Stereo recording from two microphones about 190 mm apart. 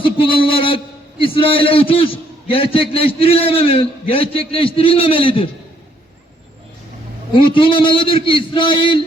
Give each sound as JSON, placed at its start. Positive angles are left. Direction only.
{"t": 0.0, "sound": "a man's voice", "side_deg": 25}
{"t": 7.3, "sound": "a man's voice", "side_deg": 25}